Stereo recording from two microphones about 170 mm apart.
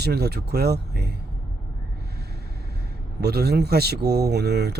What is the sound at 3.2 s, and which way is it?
Speech, 70° right (ahead or behind).